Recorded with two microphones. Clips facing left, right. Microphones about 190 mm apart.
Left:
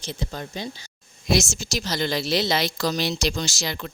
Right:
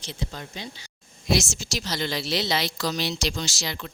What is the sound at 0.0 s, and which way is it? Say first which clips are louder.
A woman's voice: left 3 dB; 45° left (ahead or behind).